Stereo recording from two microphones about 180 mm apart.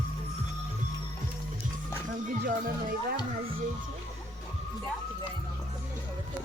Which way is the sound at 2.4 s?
50° right (ahead or behind).